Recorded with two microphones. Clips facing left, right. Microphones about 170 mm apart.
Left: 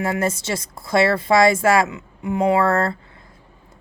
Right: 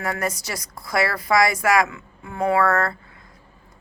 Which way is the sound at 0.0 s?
25° left (ahead or behind).